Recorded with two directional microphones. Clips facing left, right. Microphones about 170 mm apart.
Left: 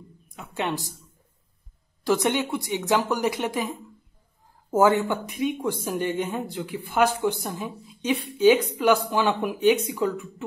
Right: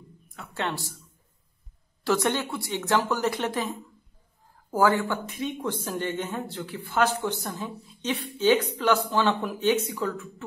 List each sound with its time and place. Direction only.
0.3 s a woman's voice: 15° left (ahead or behind)
2.0 s speech: 15° left (ahead or behind)